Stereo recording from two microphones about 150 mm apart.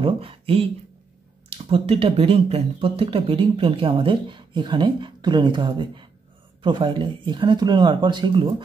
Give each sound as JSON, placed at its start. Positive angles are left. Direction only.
{"t": 0.0, "sound": "speech", "side_deg": -40}